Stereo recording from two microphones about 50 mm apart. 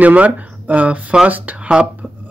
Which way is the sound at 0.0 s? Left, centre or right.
Right.